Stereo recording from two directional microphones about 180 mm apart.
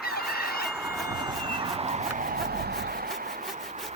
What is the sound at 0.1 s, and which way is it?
Fowl, centre (ahead or behind).